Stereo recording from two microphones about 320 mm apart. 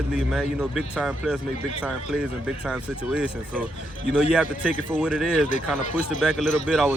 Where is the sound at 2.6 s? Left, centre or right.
Centre.